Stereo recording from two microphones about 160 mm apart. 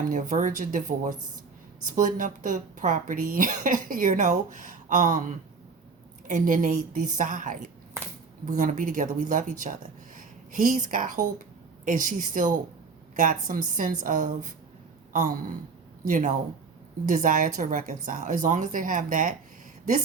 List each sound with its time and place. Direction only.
0.0 s a woman's voice: 55° right (ahead or behind)